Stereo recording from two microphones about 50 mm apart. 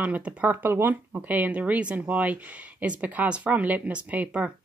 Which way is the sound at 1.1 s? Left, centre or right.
Right.